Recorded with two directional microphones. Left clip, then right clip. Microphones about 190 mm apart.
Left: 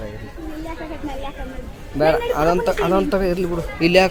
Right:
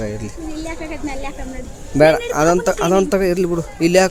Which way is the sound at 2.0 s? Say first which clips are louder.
Right 4 dB; 60° right (ahead or behind).